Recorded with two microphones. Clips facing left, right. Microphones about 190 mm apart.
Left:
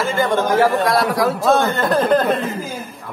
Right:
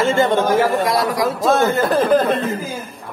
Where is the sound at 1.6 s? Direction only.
5° right (ahead or behind).